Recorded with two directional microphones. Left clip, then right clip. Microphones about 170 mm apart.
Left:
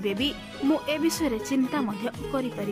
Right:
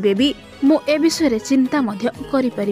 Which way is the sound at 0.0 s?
30° right (ahead or behind).